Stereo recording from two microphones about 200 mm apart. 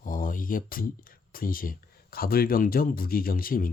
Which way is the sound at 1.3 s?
45° left (ahead or behind).